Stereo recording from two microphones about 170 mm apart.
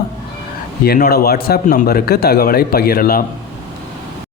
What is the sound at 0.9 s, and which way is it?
A man's voice, 65° left (ahead or behind).